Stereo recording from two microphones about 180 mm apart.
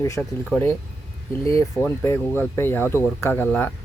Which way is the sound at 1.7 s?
10° left (ahead or behind).